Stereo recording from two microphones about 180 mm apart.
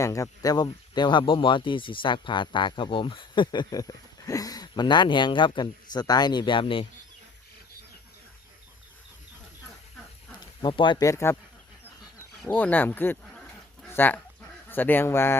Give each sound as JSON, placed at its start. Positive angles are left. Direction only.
{"t": 0.0, "sound": "speech", "side_deg": 15}
{"t": 10.6, "sound": "speech", "side_deg": 25}
{"t": 12.4, "sound": "speech", "side_deg": 5}